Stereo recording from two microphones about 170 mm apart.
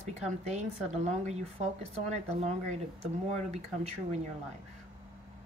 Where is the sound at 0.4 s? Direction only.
40° right (ahead or behind).